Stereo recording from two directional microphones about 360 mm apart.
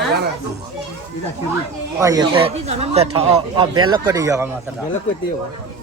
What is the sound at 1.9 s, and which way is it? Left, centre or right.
A man's voice, centre.